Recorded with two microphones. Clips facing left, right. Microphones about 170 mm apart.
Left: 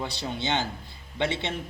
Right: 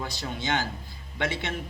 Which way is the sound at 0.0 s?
25° left (ahead or behind).